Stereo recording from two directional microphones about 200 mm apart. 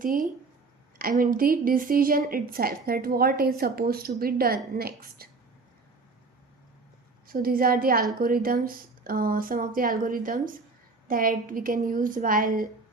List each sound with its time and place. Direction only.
0.9 s a woman's voice: 45° right (ahead or behind)
7.3 s a woman's voice: 45° right (ahead or behind)